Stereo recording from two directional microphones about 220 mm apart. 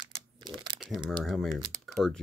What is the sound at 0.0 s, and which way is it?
Crumpling, 20° right (ahead or behind).